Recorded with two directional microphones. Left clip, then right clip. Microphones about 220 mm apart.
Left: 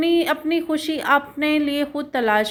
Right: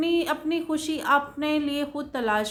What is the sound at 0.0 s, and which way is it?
Speech, 15° left (ahead or behind).